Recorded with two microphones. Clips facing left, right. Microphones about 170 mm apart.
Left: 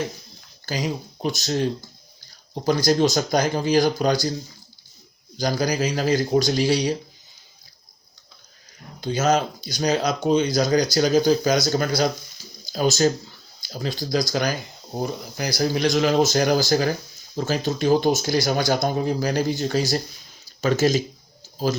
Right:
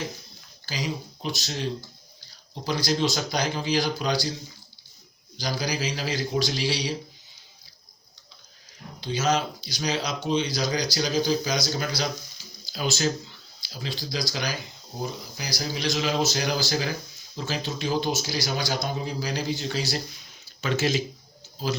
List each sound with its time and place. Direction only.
0.6 s speech: 50° left (ahead or behind)
5.4 s speech: 45° left (ahead or behind)
9.0 s speech: 50° left (ahead or behind)
20.4 s a sound: 40° left (ahead or behind)